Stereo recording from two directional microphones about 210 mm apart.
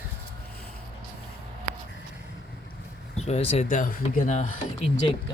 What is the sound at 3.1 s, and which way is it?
Speech, 30° left (ahead or behind).